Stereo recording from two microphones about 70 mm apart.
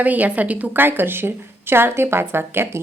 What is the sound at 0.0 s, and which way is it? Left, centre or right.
A woman's voice, right.